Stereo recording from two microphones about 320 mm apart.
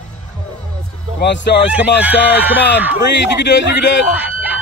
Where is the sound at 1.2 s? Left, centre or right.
Left.